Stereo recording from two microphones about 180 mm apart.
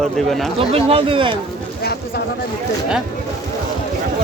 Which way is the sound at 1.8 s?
60° left (ahead or behind).